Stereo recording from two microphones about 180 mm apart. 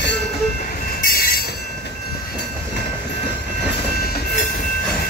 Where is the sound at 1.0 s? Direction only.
55° left (ahead or behind).